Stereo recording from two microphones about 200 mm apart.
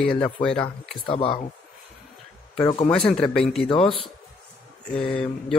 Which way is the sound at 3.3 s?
Centre (ahead or behind).